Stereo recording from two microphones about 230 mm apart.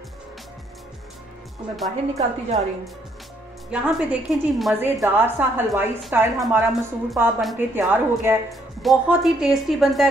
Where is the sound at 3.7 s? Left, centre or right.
Centre.